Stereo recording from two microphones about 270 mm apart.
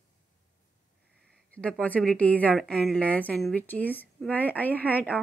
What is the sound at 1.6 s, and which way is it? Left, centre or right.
A woman's voice, centre.